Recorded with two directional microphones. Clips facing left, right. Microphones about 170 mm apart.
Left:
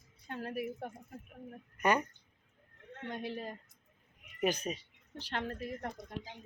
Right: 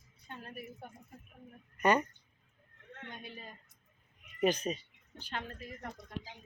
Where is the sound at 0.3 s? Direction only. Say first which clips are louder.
Left 8 dB; 85° left.